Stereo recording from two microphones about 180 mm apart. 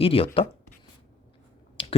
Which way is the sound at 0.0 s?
30° left (ahead or behind).